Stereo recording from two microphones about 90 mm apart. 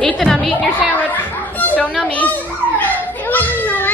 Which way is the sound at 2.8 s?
20° left (ahead or behind).